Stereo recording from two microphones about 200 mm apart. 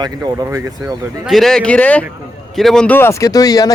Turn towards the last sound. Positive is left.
turn(degrees=20)  # may be behind; listen again after turning